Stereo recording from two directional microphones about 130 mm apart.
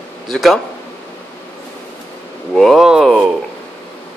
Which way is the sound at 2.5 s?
Centre (ahead or behind).